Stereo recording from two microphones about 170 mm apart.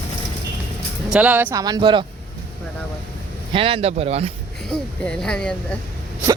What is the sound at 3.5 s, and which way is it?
Speech, 35° right (ahead or behind).